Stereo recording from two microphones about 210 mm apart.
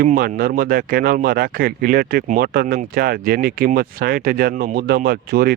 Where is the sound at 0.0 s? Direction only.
45° right (ahead or behind).